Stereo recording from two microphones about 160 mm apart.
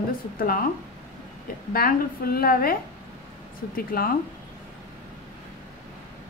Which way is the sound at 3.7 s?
65° left (ahead or behind).